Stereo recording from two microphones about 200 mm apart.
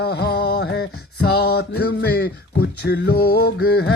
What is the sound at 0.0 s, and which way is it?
Music, 55° left (ahead or behind).